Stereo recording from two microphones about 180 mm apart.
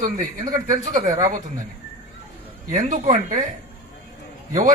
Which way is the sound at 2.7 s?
45° right (ahead or behind).